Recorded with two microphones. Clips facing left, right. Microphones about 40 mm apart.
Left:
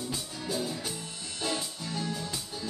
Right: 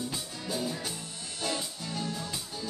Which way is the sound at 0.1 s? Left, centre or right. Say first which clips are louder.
Left 1 dB; centre.